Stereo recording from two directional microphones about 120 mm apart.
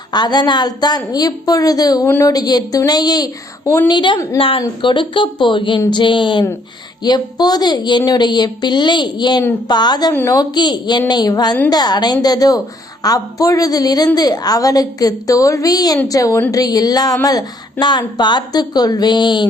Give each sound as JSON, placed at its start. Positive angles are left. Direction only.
{"t": 0.1, "sound": "a woman's voice", "side_deg": 35}
{"t": 3.8, "sound": "a woman's voice", "side_deg": 40}